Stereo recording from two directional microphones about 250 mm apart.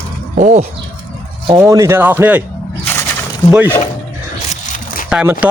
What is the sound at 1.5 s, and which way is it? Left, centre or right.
Speech, centre.